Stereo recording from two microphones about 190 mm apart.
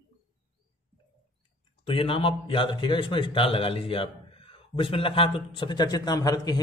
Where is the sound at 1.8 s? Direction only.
30° left (ahead or behind).